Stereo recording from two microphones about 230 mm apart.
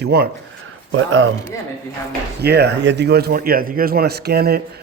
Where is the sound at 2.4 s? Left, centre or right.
Right.